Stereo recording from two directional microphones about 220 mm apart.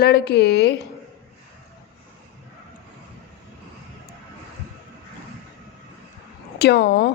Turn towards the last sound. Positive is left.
turn(degrees=45)  # may be behind; listen again after turning